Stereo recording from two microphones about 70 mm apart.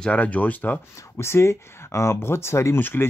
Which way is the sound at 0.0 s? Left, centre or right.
Left.